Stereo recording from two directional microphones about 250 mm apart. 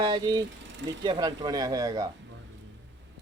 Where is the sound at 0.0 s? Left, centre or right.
Centre.